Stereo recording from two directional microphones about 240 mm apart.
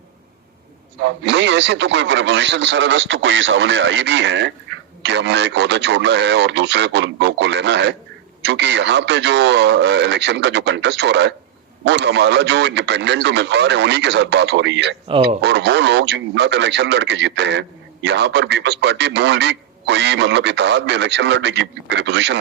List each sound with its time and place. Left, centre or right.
1.0 s speech: right